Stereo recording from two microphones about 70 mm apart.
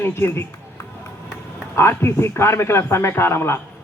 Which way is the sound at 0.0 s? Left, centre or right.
Left.